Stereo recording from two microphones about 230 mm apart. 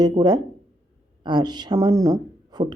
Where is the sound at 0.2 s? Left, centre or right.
Centre.